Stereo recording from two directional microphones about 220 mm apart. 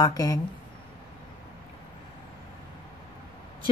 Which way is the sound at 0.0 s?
15° left (ahead or behind).